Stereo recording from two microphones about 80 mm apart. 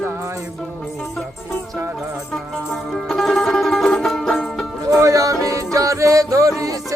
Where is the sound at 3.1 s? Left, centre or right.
Centre.